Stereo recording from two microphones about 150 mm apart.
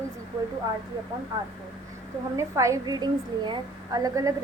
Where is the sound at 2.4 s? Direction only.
20° right (ahead or behind).